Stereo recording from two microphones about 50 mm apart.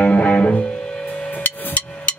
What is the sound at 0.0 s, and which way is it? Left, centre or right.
Music, left.